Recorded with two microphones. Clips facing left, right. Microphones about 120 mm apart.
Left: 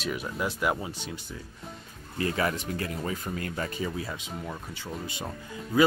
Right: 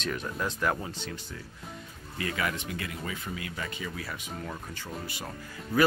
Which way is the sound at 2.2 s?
35° left (ahead or behind).